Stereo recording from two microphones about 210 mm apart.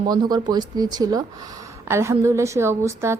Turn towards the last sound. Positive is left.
turn(degrees=-10)  # may be behind; listen again after turning